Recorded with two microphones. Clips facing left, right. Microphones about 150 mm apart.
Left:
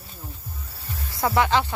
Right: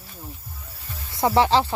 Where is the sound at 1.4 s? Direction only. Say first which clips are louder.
Right 3 dB; 30° right (ahead or behind).